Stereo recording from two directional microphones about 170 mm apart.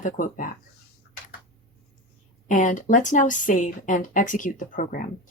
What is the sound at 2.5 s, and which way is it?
A woman's voice, 50° left (ahead or behind).